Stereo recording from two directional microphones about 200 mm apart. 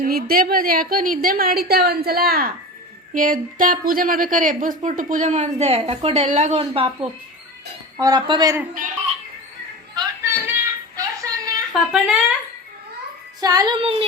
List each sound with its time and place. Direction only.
0.0 s a woman's voice: 50° right (ahead or behind); by 6.9 s 30° right (ahead or behind)
7.9 s speech: 20° right (ahead or behind)
9.9 s a sound: 10° right (ahead or behind)
11.9 s speech: 5° right (ahead or behind)
13.4 s child singing: 20° right (ahead or behind)